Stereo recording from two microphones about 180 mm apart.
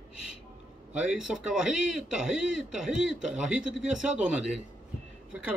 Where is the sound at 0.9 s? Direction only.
5° right (ahead or behind).